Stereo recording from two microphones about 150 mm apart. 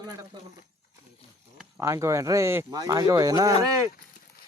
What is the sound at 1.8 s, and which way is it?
Speech, 20° right (ahead or behind).